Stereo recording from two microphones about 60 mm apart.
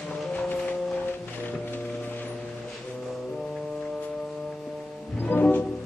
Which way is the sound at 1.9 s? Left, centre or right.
Left.